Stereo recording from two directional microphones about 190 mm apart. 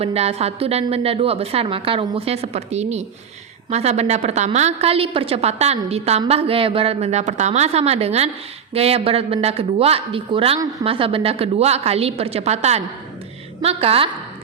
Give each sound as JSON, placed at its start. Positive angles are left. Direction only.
{"t": 0.0, "sound": "a woman's voice", "side_deg": -30}